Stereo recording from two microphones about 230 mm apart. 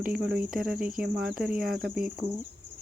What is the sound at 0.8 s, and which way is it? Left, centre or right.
Speech, right.